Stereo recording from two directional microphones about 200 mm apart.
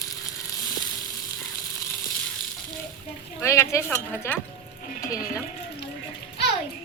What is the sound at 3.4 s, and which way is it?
Speech, 15° left (ahead or behind).